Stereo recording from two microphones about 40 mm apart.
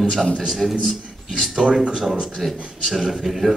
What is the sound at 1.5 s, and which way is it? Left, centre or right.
Speech, centre.